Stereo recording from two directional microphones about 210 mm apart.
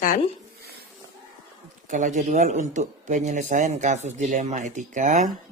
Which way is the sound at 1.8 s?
35° right (ahead or behind).